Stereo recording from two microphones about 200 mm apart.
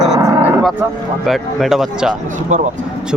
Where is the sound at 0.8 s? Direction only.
10° right (ahead or behind).